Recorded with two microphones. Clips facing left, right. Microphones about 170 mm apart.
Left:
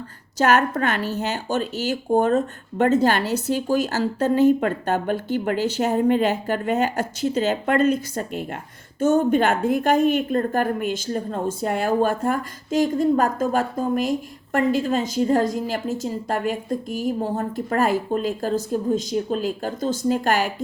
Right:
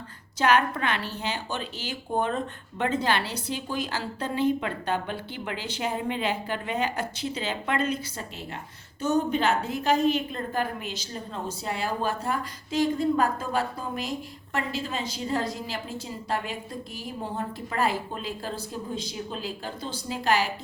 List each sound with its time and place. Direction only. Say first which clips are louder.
0.3 s a woman's voice: left 4 dB; 45° left (ahead or behind)